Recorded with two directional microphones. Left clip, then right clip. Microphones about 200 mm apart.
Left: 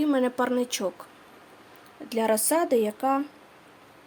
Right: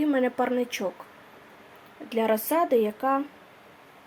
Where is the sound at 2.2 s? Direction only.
10° left (ahead or behind).